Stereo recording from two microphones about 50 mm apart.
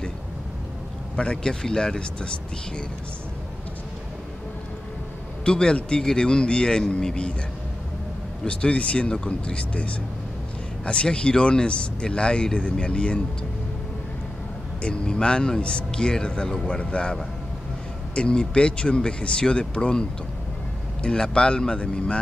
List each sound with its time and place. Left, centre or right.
1.1 s speech: centre
5.4 s speech: centre
8.5 s speech: left
14.8 s speech: centre